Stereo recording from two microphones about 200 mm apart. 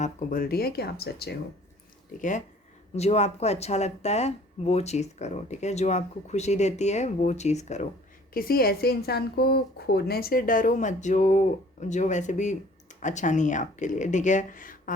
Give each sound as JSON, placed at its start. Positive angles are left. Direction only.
{"t": 0.0, "sound": "speech", "side_deg": 40}
{"t": 2.1, "sound": "speech", "side_deg": 40}
{"t": 8.3, "sound": "speech", "side_deg": 45}